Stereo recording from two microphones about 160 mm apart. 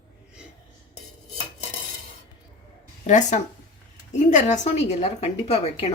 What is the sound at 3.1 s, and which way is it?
A woman's voice, 50° left (ahead or behind).